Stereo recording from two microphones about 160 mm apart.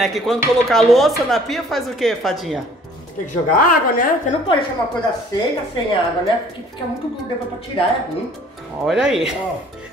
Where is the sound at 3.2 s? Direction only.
55° left (ahead or behind).